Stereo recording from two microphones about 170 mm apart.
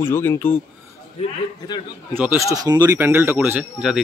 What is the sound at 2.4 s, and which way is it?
Speech, 20° right (ahead or behind).